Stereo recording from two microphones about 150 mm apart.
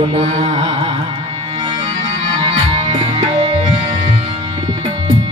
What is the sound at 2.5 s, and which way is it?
Music, 40° right (ahead or behind).